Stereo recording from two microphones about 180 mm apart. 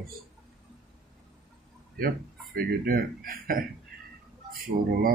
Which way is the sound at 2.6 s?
55° right (ahead or behind).